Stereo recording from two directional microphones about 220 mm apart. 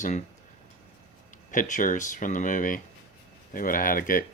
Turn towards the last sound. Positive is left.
turn(degrees=40)  # may be behind; listen again after turning